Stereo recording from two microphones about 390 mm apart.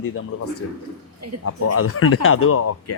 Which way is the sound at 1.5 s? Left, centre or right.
Left.